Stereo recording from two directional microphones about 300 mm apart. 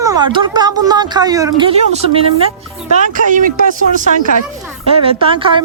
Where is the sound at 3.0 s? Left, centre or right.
Right.